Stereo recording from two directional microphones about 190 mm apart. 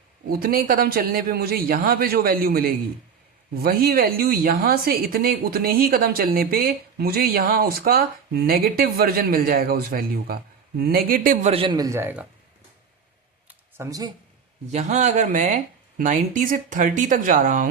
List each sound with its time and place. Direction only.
0.3 s a woman's voice: 50° right (ahead or behind)
11.5 s a man's voice: 25° right (ahead or behind)
13.5 s a sound: 15° right (ahead or behind)
14.7 s a woman's voice: 35° right (ahead or behind)